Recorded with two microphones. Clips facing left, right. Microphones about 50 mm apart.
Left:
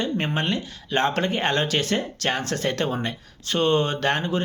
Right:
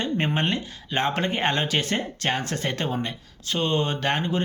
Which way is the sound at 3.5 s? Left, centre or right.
Centre.